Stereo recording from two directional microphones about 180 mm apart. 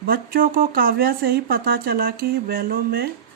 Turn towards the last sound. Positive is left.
turn(degrees=-55)  # may be behind; listen again after turning